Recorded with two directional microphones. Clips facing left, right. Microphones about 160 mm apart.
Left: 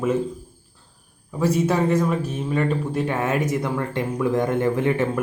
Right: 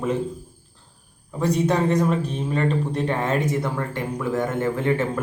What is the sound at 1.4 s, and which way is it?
A man's voice, 5° left (ahead or behind).